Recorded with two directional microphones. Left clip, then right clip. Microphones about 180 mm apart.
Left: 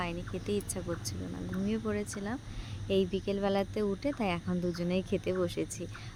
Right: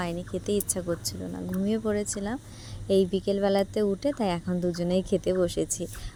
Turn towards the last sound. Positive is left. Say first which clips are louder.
# right 7 dB
turn(degrees=-35)  # may be behind; listen again after turning